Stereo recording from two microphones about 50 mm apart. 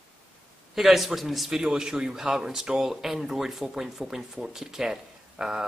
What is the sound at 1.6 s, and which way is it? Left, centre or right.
A man's voice, centre.